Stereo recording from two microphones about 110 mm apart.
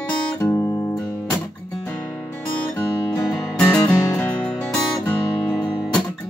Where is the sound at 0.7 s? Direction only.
30° left (ahead or behind).